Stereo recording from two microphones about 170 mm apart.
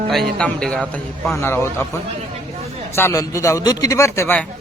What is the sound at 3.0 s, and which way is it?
A man's voice, 15° left (ahead or behind).